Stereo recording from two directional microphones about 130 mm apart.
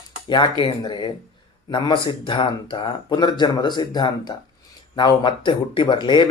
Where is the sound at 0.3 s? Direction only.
35° left (ahead or behind).